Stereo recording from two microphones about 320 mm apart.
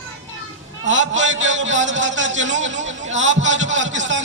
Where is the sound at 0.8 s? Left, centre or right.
Right.